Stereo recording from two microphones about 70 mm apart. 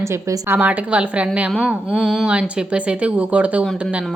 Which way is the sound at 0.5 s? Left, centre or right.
Right.